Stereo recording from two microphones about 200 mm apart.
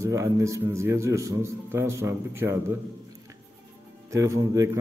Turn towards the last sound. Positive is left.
turn(degrees=-15)  # may be behind; listen again after turning